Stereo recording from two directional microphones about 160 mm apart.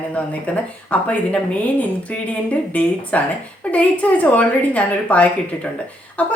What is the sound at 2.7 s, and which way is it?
A woman's voice, 10° left (ahead or behind).